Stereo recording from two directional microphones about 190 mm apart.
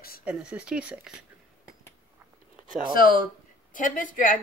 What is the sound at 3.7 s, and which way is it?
Speech, 45° left (ahead or behind).